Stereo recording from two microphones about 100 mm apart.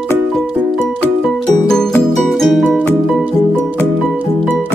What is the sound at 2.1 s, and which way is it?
Music, 5° left (ahead or behind).